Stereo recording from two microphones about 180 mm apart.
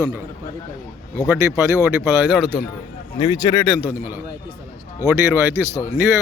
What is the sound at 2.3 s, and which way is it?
Speech, 5° right (ahead or behind).